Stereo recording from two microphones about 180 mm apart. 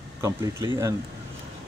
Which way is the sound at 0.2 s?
15° right (ahead or behind).